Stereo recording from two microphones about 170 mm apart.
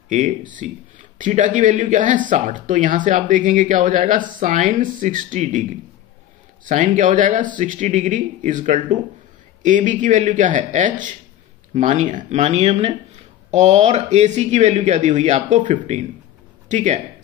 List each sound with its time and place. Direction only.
0.1 s speech: 50° right (ahead or behind)